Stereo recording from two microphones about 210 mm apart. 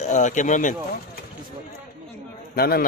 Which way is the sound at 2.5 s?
45° left (ahead or behind).